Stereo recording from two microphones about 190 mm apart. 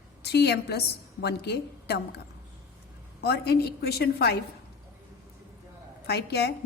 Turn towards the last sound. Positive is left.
turn(degrees=60)  # may be behind; listen again after turning